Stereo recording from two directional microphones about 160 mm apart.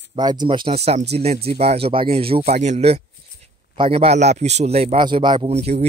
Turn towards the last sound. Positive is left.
turn(degrees=-40)  # may be behind; listen again after turning